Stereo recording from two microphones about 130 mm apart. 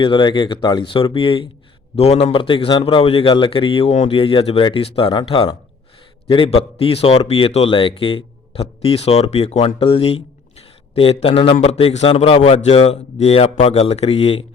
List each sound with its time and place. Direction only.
0.0 s a man's voice: 40° left (ahead or behind)
11.6 s a man's voice: 55° left (ahead or behind)